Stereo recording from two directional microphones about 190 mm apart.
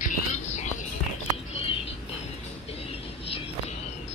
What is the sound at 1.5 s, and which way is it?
Bird, 30° left (ahead or behind).